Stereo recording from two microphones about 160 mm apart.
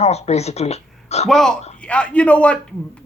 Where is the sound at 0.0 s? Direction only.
40° left (ahead or behind).